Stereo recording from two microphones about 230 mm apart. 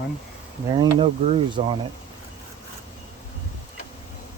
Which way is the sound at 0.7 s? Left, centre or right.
Right.